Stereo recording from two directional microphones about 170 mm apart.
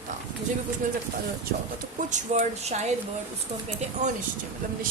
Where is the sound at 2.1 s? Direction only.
45° right (ahead or behind).